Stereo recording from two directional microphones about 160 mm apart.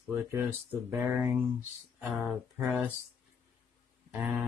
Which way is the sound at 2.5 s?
15° right (ahead or behind).